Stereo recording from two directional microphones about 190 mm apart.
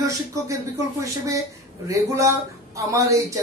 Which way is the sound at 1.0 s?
15° right (ahead or behind).